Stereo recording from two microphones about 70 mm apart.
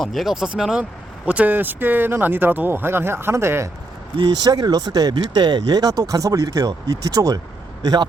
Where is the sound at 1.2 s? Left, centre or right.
Right.